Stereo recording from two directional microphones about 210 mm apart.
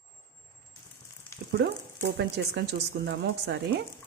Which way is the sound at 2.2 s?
55° right (ahead or behind).